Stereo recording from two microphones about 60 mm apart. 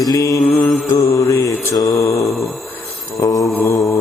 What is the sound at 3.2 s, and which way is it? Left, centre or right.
Mantra, left.